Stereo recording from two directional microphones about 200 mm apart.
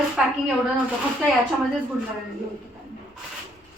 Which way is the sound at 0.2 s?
5° right (ahead or behind).